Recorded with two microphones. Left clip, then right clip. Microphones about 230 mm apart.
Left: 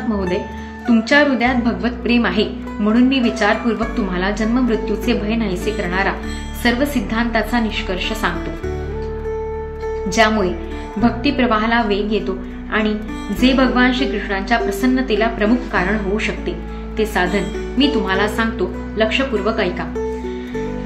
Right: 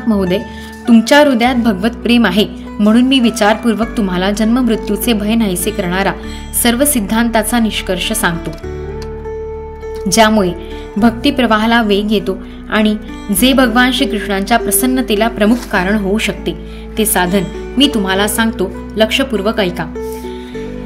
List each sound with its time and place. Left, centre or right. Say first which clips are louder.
0.1 s a woman's voice: right 7 dB; right
10.0 s a woman's voice: right 5 dB; right